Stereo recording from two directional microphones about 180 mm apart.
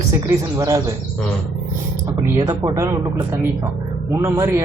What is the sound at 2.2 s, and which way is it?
Speech, 20° right (ahead or behind).